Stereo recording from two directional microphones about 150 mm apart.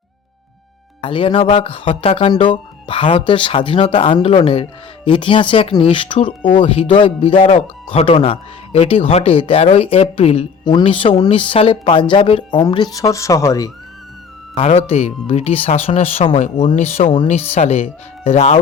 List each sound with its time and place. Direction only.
1.0 s speech: 35° left (ahead or behind)
14.6 s speech: 40° left (ahead or behind)